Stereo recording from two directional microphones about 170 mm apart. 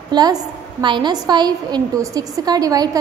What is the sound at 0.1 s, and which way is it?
A woman's voice, 25° right (ahead or behind).